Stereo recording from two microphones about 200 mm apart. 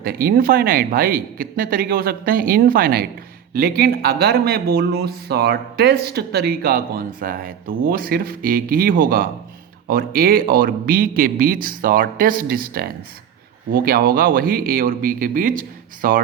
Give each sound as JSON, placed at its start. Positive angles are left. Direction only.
{"t": 0.0, "sound": "speech", "side_deg": -50}